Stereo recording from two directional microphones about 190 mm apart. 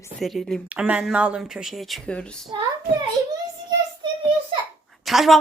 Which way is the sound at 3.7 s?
25° right (ahead or behind).